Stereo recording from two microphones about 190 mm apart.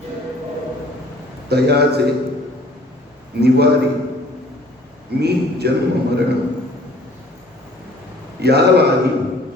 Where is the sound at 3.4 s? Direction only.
60° right (ahead or behind).